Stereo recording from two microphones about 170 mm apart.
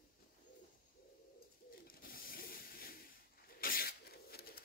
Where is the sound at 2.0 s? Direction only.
60° left (ahead or behind).